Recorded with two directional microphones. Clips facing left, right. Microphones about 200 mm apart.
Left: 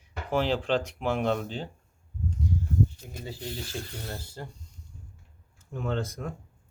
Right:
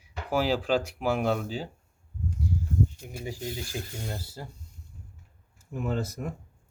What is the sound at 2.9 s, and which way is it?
Speech, 10° right (ahead or behind).